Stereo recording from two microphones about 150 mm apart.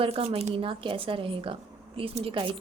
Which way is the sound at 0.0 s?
40° right (ahead or behind).